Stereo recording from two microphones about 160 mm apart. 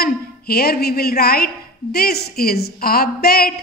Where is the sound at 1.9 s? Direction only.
85° left.